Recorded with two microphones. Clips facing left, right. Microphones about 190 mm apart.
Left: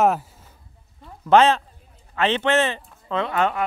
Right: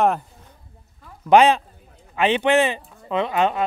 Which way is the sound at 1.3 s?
15° right (ahead or behind).